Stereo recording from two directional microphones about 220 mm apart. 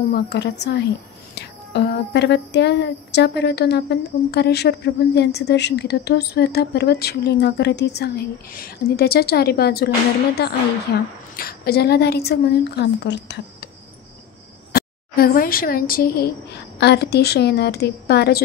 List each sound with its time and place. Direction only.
0.1 s speech: 50° left (ahead or behind)
14.7 s speech: 45° left (ahead or behind)